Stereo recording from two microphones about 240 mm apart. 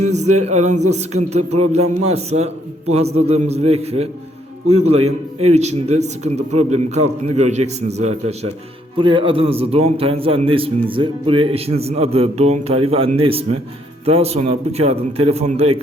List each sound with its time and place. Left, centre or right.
0.0 s a man's voice: right
1.8 s a man's voice: right
2.1 s a man's voice: right